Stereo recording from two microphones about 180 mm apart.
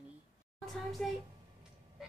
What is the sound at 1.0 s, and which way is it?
Speech, 5° left (ahead or behind).